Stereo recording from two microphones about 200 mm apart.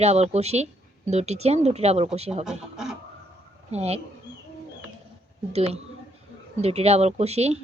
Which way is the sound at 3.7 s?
30° right (ahead or behind).